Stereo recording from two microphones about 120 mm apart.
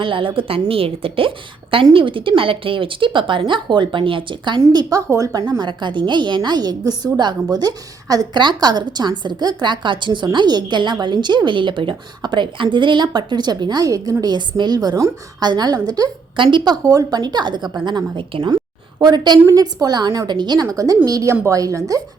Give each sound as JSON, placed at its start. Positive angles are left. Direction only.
{"t": 0.0, "sound": "a woman's voice", "side_deg": -45}
{"t": 5.5, "sound": "a woman's voice", "side_deg": -40}